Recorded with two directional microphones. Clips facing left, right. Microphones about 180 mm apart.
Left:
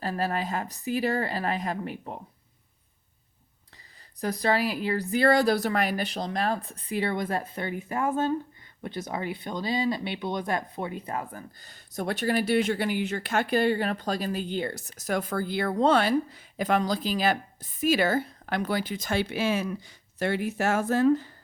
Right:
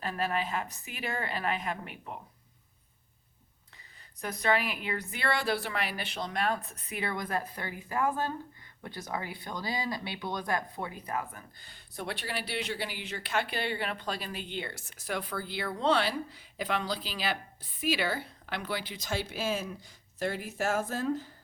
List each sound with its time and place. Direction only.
0.0 s speech: 35° left (ahead or behind)
4.2 s speech: 35° left (ahead or behind); by 21.3 s 70° left (ahead or behind)